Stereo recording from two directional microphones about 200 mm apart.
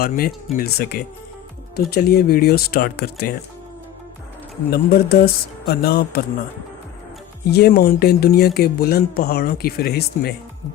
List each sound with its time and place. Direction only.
0.0 s speech: 45° left (ahead or behind)
4.7 s speech: 50° left (ahead or behind)
7.4 s speech: 50° left (ahead or behind)